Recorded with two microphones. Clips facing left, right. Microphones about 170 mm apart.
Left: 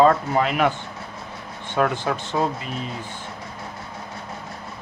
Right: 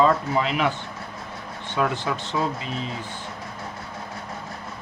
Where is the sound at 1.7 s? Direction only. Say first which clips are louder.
Left 3 dB; 50° left (ahead or behind).